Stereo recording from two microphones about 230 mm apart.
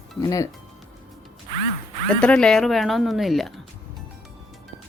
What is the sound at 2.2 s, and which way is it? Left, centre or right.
Speech, centre.